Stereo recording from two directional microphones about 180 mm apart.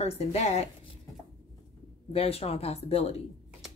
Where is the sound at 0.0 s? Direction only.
35° left (ahead or behind).